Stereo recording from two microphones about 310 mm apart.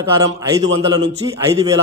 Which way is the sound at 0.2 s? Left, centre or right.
Centre.